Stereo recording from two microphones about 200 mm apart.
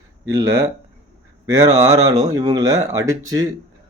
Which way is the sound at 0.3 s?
15° right (ahead or behind).